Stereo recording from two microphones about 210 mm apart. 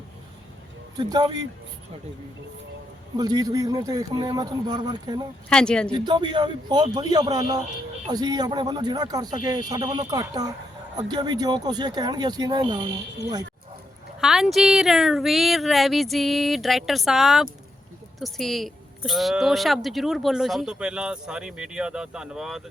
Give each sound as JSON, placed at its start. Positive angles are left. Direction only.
{"t": 0.9, "sound": "speech", "side_deg": -20}
{"t": 3.2, "sound": "speech", "side_deg": -20}
{"t": 5.5, "sound": "speech", "side_deg": 5}
{"t": 5.9, "sound": "speech", "side_deg": -20}
{"t": 14.2, "sound": "speech", "side_deg": 0}